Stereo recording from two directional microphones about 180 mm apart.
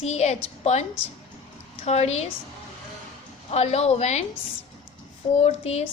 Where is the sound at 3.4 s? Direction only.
35° left (ahead or behind).